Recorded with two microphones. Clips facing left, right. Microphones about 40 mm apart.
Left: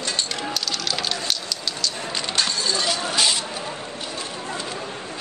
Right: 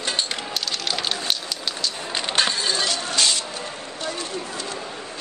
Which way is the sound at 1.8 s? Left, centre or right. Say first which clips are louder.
Even; right.